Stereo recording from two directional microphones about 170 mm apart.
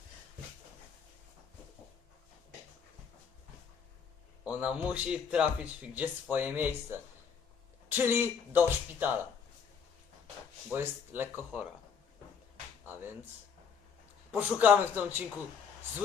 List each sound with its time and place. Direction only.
4.4 s speech: 5° right (ahead or behind)
10.7 s speech: 10° right (ahead or behind)
14.3 s speech: 10° right (ahead or behind)